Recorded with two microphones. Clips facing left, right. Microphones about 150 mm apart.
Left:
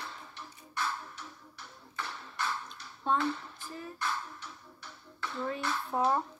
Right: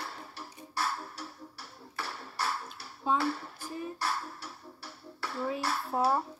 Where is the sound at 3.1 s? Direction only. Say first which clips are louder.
Right 1 dB; 35° right (ahead or behind).